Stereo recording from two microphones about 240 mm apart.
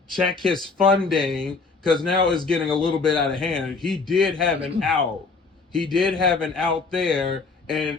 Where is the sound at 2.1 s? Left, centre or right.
Right.